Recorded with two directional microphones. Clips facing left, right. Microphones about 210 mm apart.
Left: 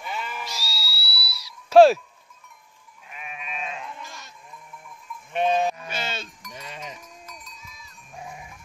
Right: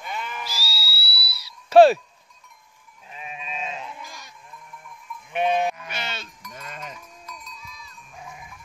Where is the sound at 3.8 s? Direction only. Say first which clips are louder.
Even; 5° right (ahead or behind).